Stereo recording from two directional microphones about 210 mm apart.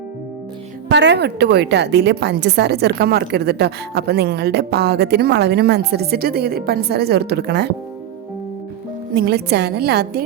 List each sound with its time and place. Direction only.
0.9 s a woman's voice: 55° right (ahead or behind)
9.1 s a woman's voice: 50° right (ahead or behind)